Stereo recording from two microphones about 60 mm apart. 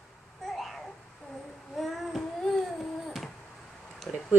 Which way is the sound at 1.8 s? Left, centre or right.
Centre.